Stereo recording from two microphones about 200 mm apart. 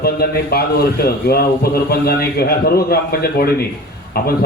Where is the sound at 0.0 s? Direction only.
50° left (ahead or behind).